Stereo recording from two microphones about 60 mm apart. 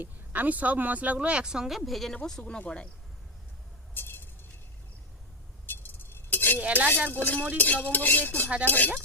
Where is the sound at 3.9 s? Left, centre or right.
Left.